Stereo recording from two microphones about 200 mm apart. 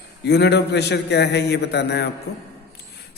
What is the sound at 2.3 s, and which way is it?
Speech, 90° left.